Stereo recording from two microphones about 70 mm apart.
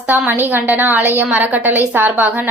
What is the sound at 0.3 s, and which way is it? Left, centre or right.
A woman's voice, right.